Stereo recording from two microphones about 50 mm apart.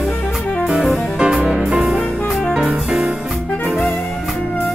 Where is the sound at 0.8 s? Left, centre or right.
Centre.